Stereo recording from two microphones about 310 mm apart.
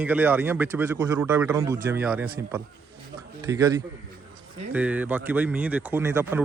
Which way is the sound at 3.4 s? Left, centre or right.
Centre.